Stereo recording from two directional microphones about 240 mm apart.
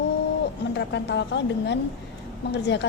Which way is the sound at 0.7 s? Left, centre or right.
Left.